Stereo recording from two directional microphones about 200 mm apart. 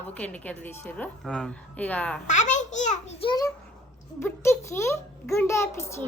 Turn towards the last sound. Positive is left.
turn(degrees=15)  # may be behind; listen again after turning